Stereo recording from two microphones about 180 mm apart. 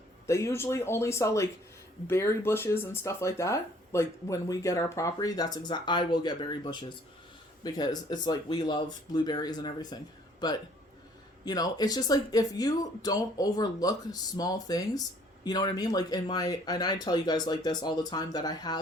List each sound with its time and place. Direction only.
0.3 s speech: 15° left (ahead or behind)